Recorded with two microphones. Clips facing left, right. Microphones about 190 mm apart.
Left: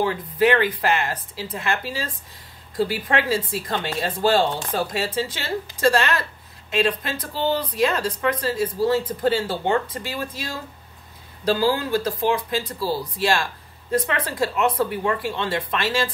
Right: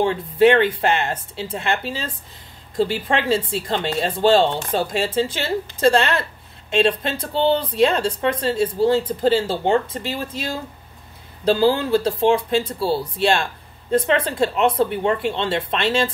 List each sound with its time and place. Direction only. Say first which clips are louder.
0.0 s speech: right 5 dB; 25° right (ahead or behind)